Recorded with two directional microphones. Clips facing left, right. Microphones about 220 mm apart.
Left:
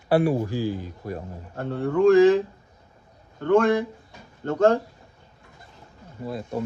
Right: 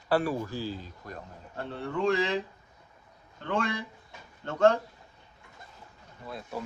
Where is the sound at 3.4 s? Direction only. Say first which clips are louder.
Left 12 dB; 45° left (ahead or behind).